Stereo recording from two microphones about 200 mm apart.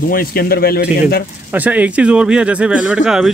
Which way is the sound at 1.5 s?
10° right (ahead or behind).